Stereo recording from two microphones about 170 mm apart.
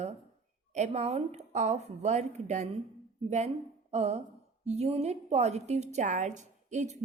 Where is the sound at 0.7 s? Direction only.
45° right (ahead or behind).